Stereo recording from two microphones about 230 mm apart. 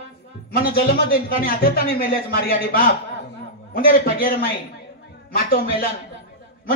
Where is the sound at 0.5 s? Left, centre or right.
Left.